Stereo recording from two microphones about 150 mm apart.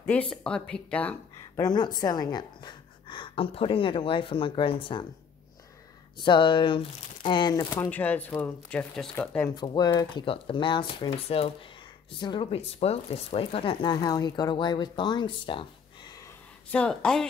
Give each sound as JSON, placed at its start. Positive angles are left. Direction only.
{"t": 0.0, "sound": "speech", "side_deg": 5}
{"t": 1.6, "sound": "a woman's voice", "side_deg": 30}
{"t": 6.1, "sound": "speech", "side_deg": 30}
{"t": 7.8, "sound": "speech", "side_deg": 10}
{"t": 9.6, "sound": "speech", "side_deg": 30}
{"t": 16.7, "sound": "speech", "side_deg": 5}